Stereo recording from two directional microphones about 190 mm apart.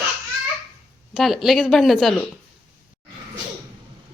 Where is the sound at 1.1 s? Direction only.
Centre (ahead or behind).